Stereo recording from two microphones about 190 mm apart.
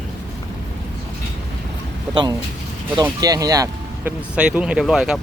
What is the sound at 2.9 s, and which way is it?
Speech, 20° right (ahead or behind).